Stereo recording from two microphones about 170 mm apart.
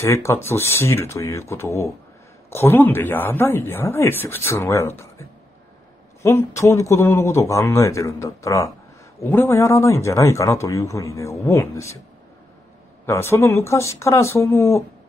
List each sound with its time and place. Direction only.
0.0 s a man's voice: 15° left (ahead or behind)
6.2 s a man's voice: 15° left (ahead or behind)
13.0 s a man's voice: 15° left (ahead or behind)